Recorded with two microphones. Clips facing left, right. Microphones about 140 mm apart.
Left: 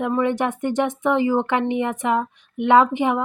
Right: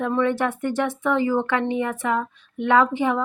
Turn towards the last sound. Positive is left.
turn(degrees=20)  # may be behind; listen again after turning